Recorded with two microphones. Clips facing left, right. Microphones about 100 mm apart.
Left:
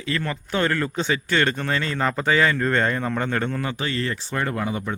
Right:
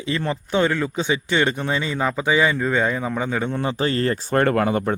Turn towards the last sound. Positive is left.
turn(degrees=-60)  # may be behind; listen again after turning